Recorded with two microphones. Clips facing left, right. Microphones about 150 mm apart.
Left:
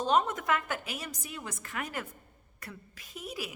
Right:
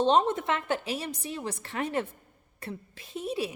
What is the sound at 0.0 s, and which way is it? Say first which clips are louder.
A woman's voice: right 4 dB; 30° right (ahead or behind).